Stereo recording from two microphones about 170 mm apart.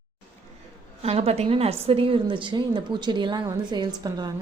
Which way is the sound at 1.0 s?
35° right (ahead or behind).